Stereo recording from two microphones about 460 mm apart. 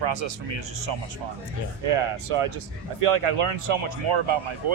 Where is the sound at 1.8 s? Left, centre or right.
Right.